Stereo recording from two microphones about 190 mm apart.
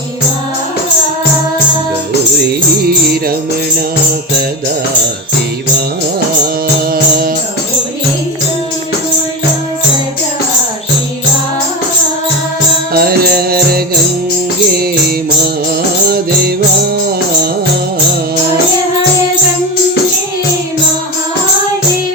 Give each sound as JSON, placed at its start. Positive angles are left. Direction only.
{"t": 2.8, "sound": "music", "side_deg": -55}
{"t": 12.9, "sound": "music", "side_deg": -55}
{"t": 16.0, "sound": "music", "side_deg": -55}